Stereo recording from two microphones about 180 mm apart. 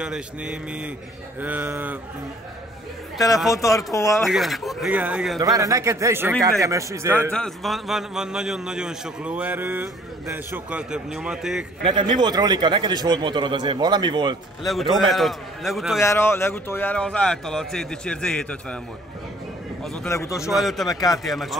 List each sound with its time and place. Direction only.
0.0 s a man's voice: 5° right (ahead or behind)
3.5 s speech: 15° left (ahead or behind)
4.3 s a man's voice: centre (ahead or behind)
5.4 s a man's voice: 20° right (ahead or behind)
7.3 s a man's voice: centre (ahead or behind)
11.8 s a man's voice: 25° right (ahead or behind)
15.0 s a man's voice: centre (ahead or behind)
16.0 s a man's voice: 15° left (ahead or behind)
19.8 s a man's voice: 5° left (ahead or behind)
20.1 s speech: 15° left (ahead or behind)
20.4 s a man's voice: centre (ahead or behind)
20.9 s speech: 20° left (ahead or behind)
21.2 s a man's voice: centre (ahead or behind)